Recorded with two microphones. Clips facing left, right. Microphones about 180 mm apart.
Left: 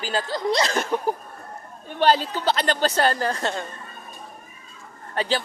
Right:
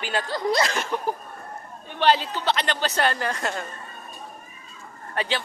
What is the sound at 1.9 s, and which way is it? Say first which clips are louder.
A woman's voice: left 1 dB; 45° left (ahead or behind).